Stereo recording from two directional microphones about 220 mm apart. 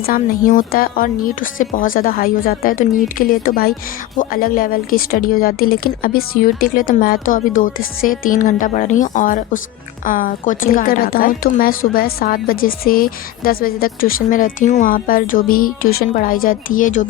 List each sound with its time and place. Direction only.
0.0 s a woman's voice: 40° left (ahead or behind)